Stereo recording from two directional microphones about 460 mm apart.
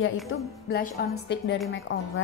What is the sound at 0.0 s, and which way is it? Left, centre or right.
A woman's voice, left.